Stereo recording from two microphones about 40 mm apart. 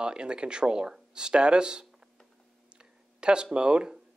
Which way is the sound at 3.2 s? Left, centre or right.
Right.